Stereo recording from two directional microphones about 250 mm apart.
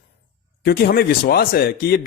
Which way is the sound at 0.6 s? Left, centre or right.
Left.